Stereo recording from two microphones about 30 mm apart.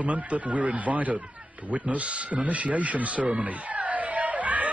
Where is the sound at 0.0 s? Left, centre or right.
Right.